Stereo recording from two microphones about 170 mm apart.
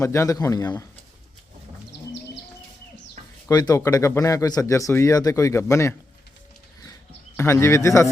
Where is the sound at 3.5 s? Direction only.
20° left (ahead or behind).